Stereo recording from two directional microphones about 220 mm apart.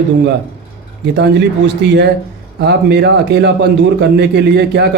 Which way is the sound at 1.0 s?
50° right (ahead or behind).